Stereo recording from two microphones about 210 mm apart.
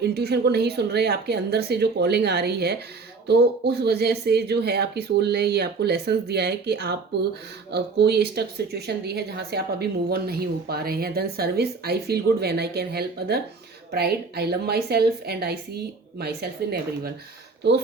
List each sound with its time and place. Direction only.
0.0 s speech: 50° right (ahead or behind)